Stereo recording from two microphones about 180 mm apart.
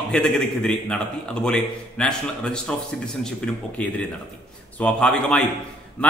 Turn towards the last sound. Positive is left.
turn(degrees=5)  # may be behind; listen again after turning